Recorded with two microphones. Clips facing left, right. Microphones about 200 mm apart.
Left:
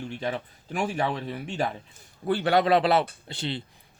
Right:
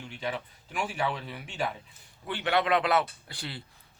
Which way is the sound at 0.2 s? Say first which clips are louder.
Even; 40° left (ahead or behind).